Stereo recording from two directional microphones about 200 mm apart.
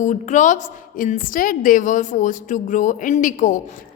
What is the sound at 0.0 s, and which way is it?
A woman's voice, 40° left (ahead or behind).